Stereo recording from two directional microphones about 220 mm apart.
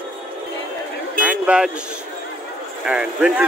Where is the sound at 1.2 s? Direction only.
5° right (ahead or behind).